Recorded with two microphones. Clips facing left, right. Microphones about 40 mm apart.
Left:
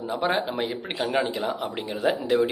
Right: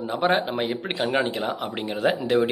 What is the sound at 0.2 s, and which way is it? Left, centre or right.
Speech, centre.